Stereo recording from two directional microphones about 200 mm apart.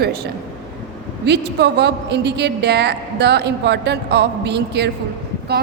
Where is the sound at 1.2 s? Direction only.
55° right (ahead or behind).